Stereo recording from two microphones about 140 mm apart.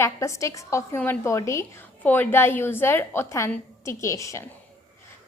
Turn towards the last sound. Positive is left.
turn(degrees=20)  # may be behind; listen again after turning